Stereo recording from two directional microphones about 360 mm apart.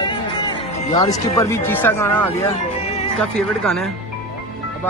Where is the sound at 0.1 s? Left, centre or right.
Centre.